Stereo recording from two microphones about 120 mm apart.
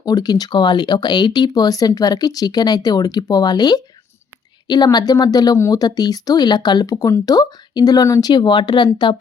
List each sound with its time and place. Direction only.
0.0 s speech: 35° left (ahead or behind)